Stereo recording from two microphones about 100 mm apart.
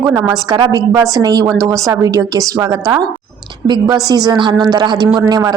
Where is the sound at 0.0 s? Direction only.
30° right (ahead or behind).